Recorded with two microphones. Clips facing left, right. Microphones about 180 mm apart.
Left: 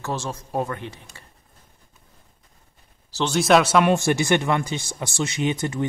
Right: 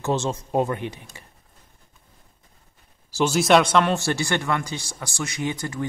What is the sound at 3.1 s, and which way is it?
Mantra, 10° right (ahead or behind).